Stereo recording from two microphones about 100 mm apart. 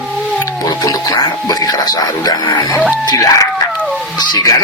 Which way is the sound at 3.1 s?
35° left (ahead or behind).